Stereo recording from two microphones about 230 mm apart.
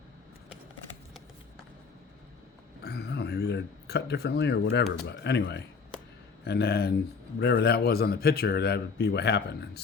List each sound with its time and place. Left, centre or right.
2.8 s a man's voice: left